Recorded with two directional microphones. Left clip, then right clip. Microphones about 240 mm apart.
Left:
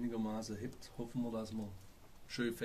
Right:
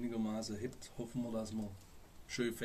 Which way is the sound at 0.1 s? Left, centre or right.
Centre.